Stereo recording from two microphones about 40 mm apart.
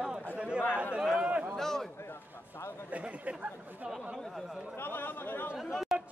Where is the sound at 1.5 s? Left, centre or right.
Centre.